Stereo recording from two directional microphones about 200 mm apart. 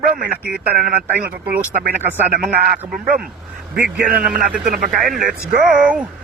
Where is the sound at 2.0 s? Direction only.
10° right (ahead or behind).